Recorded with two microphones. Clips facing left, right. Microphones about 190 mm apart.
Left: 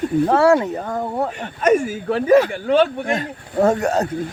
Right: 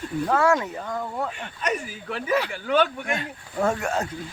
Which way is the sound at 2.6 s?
30° left (ahead or behind).